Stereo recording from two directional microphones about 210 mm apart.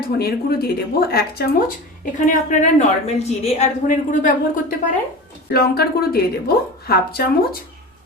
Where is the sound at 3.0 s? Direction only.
30° left (ahead or behind); by 7.6 s 45° left (ahead or behind).